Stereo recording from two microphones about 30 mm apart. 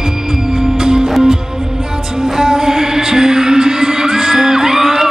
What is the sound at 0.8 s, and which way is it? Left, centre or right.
Music, right.